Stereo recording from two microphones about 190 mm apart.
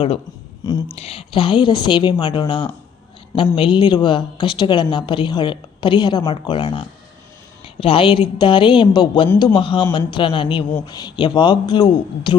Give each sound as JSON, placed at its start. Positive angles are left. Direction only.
{"t": 0.6, "sound": "speech", "side_deg": 20}